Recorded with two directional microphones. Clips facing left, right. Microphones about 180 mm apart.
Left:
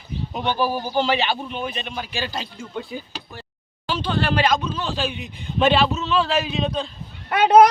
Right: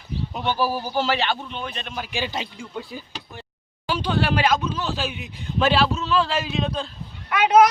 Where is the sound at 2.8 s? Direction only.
Centre (ahead or behind).